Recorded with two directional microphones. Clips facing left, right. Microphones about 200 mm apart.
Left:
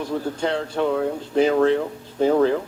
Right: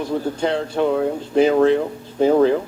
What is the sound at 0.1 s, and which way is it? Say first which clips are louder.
Speech: right 3 dB; 25° right (ahead or behind).